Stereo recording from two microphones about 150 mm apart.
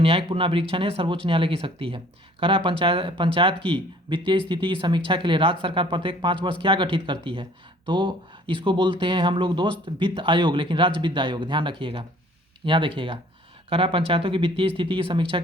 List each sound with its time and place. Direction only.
0.0 s speech: 40° right (ahead or behind)